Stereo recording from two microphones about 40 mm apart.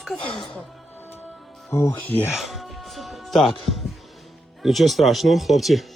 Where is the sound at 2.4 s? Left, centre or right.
Centre.